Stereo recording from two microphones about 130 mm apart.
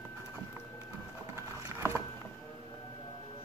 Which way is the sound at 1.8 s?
15° right (ahead or behind).